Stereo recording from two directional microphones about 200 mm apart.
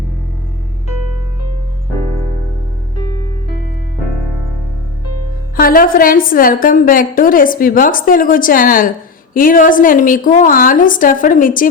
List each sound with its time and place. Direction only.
5.5 s a woman's voice: 45° left (ahead or behind)